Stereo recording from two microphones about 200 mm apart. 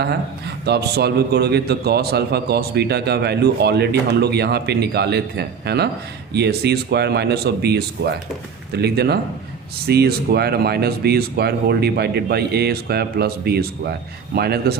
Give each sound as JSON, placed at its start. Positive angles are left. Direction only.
{"t": 0.0, "sound": "a man's voice", "side_deg": -55}